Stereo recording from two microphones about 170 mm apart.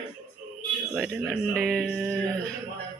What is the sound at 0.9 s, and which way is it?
A man's voice, centre (ahead or behind).